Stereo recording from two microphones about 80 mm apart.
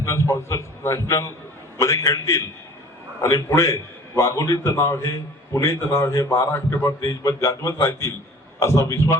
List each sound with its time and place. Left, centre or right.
0.0 s a man's voice: left